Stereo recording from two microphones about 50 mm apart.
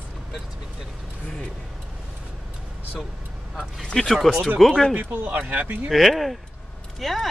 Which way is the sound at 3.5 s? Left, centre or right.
Centre.